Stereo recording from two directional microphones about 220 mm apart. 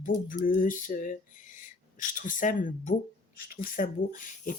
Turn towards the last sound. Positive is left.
turn(degrees=40)  # may be behind; listen again after turning